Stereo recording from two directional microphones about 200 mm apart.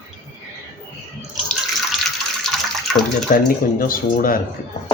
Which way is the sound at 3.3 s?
45° left (ahead or behind).